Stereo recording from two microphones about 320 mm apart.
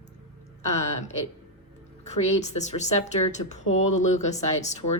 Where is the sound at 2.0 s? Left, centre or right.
Left.